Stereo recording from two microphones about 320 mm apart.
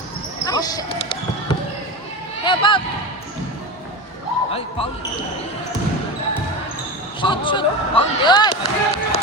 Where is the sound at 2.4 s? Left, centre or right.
Centre.